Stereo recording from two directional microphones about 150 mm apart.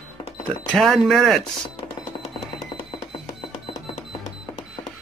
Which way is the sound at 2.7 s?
40° left (ahead or behind).